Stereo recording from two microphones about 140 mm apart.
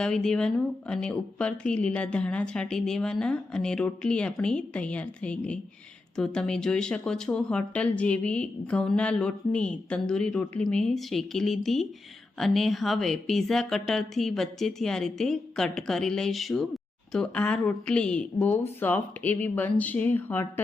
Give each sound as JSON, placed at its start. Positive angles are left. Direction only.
{"t": 0.0, "sound": "speech", "side_deg": 5}